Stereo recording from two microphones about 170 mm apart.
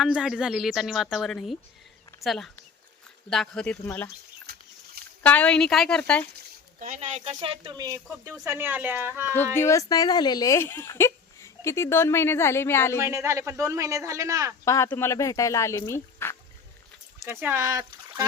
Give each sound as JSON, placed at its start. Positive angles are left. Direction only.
{"t": 0.0, "sound": "speech", "side_deg": -5}
{"t": 5.2, "sound": "speech", "side_deg": 10}
{"t": 6.7, "sound": "speech", "side_deg": -45}
{"t": 7.3, "sound": "a man's voice", "side_deg": -30}
{"t": 9.6, "sound": "speech", "side_deg": 15}
{"t": 13.0, "sound": "a man's voice", "side_deg": -15}
{"t": 14.6, "sound": "speech", "side_deg": 15}
{"t": 17.2, "sound": "speech", "side_deg": -15}